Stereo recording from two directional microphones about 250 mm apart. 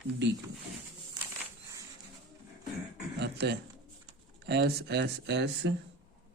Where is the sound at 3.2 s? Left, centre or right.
Right.